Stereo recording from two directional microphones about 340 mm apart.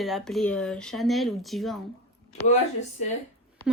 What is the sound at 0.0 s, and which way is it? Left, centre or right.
A woman's voice, centre.